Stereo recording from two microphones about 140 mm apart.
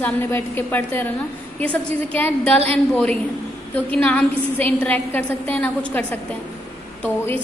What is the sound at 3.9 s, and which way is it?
A woman's voice, 10° left (ahead or behind).